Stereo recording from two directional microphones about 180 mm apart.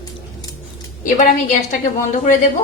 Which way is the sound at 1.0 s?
45° left (ahead or behind).